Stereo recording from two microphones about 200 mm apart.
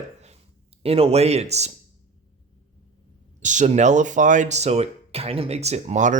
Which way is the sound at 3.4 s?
40° right (ahead or behind).